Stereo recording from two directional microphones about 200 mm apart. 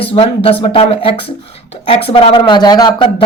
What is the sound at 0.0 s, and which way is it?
Speech, 30° left (ahead or behind).